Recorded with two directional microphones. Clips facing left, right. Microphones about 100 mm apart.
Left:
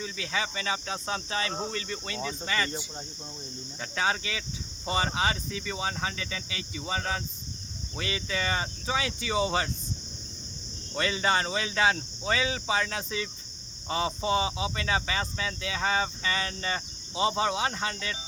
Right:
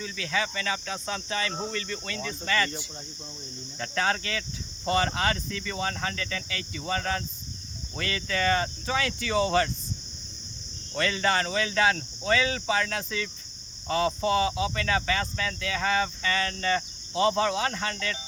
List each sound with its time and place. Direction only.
0.0 s speech: 20° left (ahead or behind)
3.8 s speech: 10° left (ahead or behind)
10.9 s speech: 20° left (ahead or behind)